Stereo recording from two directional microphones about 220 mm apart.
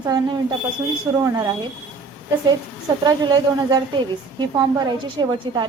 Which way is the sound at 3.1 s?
20° right (ahead or behind).